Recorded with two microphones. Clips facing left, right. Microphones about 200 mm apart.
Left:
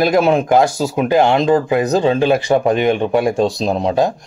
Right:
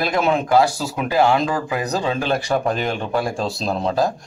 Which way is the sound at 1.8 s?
40° left (ahead or behind).